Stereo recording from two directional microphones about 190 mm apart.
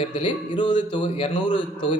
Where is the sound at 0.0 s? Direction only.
25° left (ahead or behind).